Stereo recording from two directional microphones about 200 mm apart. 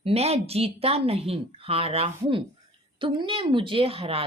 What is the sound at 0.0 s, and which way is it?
A woman's voice, 30° right (ahead or behind).